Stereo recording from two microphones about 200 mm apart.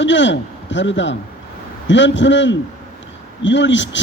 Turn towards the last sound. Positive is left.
turn(degrees=65)  # may be behind; listen again after turning